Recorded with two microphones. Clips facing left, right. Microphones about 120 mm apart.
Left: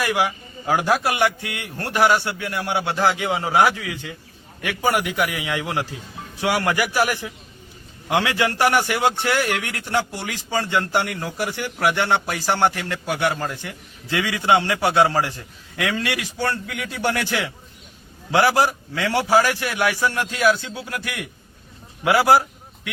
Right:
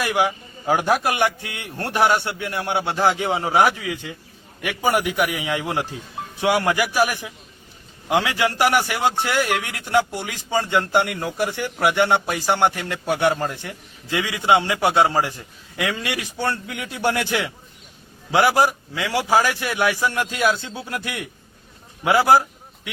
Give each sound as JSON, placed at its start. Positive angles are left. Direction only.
{"t": 0.0, "sound": "a man's voice", "side_deg": -20}
{"t": 14.1, "sound": "a man's voice", "side_deg": -10}
{"t": 19.3, "sound": "a man's voice", "side_deg": -20}